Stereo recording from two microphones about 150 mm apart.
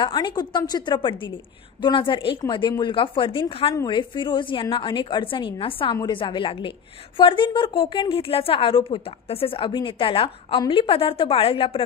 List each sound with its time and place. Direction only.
0.0 s a woman's voice: 30° left (ahead or behind)